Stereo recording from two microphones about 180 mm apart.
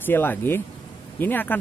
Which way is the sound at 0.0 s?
10° left (ahead or behind).